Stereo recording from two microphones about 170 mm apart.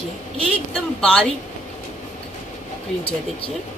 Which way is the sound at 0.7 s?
5° left (ahead or behind).